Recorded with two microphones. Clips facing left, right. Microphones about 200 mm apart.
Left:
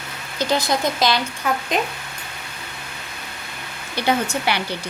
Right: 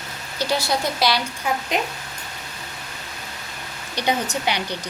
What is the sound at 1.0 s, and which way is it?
Speech, 10° right (ahead or behind).